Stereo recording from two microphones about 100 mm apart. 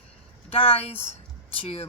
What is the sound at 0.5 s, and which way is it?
Speech, 70° left (ahead or behind).